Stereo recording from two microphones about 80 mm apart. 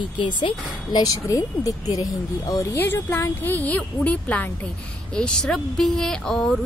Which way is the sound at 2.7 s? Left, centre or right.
Left.